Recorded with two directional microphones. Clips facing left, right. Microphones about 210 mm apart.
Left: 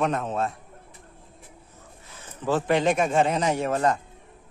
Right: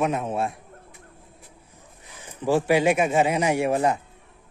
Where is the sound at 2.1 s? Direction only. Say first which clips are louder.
Right 3 dB; 15° right (ahead or behind).